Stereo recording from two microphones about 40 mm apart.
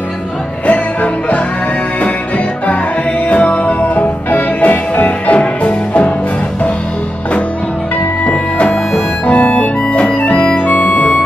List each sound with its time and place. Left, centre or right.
0.7 s music: left
8.3 s music: left
9.2 s music: left